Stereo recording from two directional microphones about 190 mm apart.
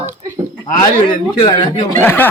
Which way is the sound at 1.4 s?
20° left (ahead or behind).